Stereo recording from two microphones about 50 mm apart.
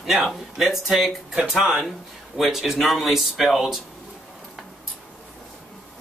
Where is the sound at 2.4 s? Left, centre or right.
Centre.